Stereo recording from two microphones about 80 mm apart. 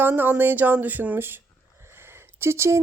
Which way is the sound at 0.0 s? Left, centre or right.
Right.